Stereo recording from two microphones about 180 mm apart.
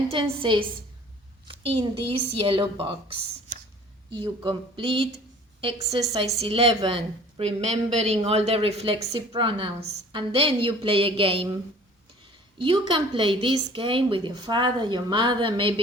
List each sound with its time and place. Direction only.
0.1 s a woman's voice: 25° right (ahead or behind)
12.5 s a woman's voice: 25° right (ahead or behind)